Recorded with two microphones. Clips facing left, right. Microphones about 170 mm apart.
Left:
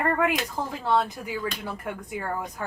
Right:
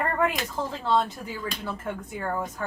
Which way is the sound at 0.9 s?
15° left (ahead or behind).